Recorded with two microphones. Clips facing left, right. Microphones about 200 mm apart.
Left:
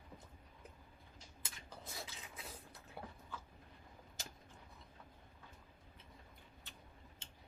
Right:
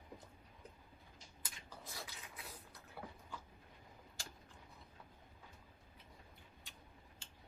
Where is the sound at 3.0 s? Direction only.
25° left (ahead or behind).